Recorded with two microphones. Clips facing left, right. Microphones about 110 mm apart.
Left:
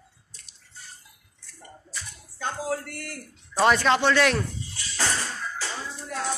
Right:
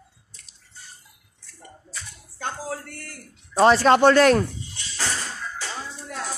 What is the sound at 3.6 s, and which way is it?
Speech, 35° right (ahead or behind).